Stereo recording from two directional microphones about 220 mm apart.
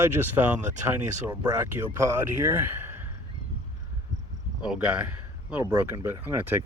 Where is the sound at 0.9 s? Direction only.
10° right (ahead or behind).